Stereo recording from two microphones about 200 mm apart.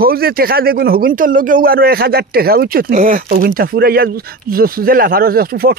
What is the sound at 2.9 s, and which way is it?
Speech, 30° right (ahead or behind).